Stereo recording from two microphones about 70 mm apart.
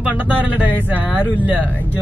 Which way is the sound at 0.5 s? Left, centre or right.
Right.